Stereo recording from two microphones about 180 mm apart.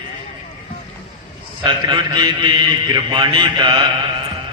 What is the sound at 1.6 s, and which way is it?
A man's voice, 25° right (ahead or behind).